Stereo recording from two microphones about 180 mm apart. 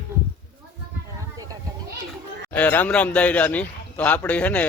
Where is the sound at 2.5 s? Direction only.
10° left (ahead or behind).